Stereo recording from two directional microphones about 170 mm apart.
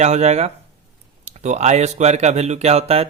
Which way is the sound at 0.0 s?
40° right (ahead or behind).